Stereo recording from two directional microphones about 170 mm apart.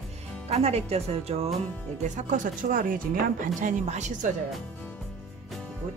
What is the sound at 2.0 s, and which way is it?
Speech, 45° right (ahead or behind).